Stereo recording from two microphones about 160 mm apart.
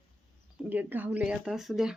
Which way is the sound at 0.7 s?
10° right (ahead or behind).